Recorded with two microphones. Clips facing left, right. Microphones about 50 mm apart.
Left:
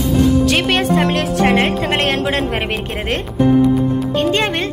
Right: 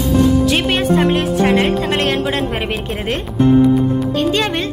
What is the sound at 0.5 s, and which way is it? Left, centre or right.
Speech, left.